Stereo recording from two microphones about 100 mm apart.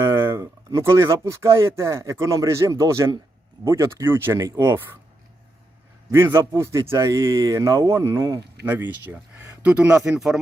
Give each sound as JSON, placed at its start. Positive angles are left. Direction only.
{"t": 0.0, "sound": "speech", "side_deg": -25}
{"t": 6.1, "sound": "speech", "side_deg": -25}
{"t": 8.6, "sound": "speech", "side_deg": -20}
{"t": 10.0, "sound": "speech", "side_deg": -5}